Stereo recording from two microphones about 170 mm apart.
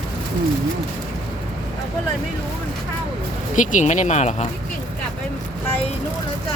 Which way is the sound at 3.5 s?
50° left (ahead or behind).